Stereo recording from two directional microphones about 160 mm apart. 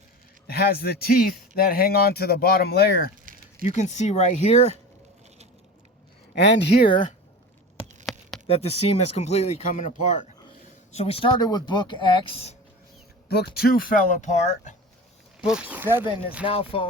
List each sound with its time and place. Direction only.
0.4 s speech: 75° left (ahead or behind)
3.3 s a sound: 55° right (ahead or behind)
3.6 s speech: 45° left (ahead or behind)
6.3 s speech: 90° left
6.7 s speech: 30° left (ahead or behind)
8.1 s a sound: centre (ahead or behind)
8.4 s speech: 40° left (ahead or behind)
10.9 s speech: 40° left (ahead or behind)
13.2 s speech: 90° left; by 14.8 s 45° left (ahead or behind)
15.4 s speech: 5° right (ahead or behind)
16.5 s speech: 35° left (ahead or behind)